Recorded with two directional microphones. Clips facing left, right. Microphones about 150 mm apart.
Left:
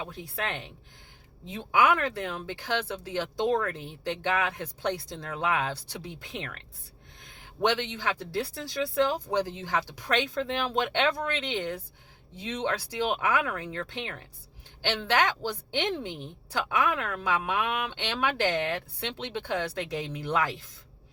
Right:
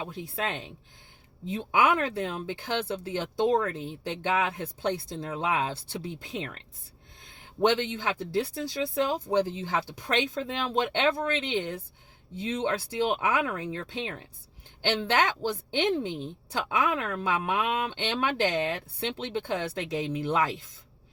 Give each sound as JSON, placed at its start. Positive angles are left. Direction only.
{"t": 0.0, "sound": "speech", "side_deg": -20}
{"t": 1.7, "sound": "speech", "side_deg": -20}
{"t": 7.9, "sound": "speech", "side_deg": -20}